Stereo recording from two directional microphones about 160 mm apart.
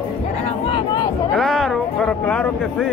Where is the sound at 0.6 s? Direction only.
30° left (ahead or behind).